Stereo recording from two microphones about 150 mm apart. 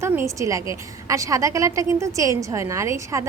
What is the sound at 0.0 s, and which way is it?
A woman's voice, 20° right (ahead or behind).